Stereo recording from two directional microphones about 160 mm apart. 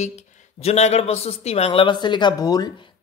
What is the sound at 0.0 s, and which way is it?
Speech, 40° left (ahead or behind).